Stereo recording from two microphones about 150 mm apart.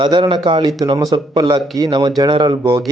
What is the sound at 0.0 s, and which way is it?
Speech, 35° right (ahead or behind).